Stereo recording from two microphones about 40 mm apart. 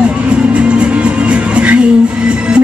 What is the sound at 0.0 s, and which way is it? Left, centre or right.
Music, right.